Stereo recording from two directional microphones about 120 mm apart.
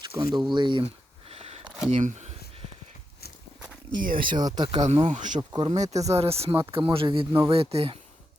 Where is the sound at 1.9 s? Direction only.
80° right; by 2.7 s 60° right (ahead or behind).